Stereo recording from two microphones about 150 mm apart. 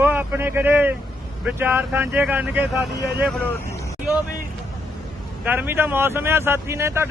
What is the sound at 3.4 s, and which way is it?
Vehicle, 15° left (ahead or behind).